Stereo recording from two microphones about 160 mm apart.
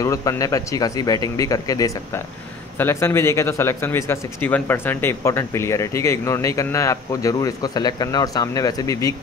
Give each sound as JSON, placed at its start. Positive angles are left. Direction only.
{"t": 0.0, "sound": "speech", "side_deg": 20}